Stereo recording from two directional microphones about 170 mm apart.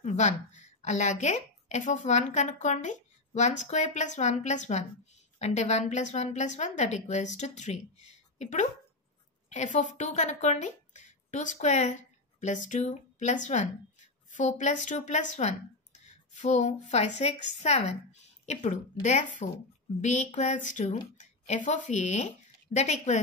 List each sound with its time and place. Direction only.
0.0 s a woman's voice: 45° left (ahead or behind)